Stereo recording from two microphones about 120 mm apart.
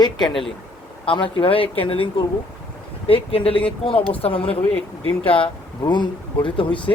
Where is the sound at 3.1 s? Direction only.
50° left (ahead or behind).